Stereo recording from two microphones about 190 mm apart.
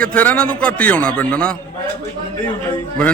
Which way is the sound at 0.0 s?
5° left (ahead or behind).